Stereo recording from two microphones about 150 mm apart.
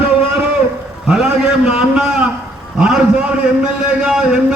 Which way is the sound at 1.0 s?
5° right (ahead or behind).